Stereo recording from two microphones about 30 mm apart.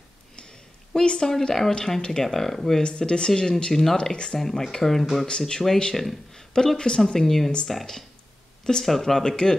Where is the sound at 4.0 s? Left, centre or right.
Left.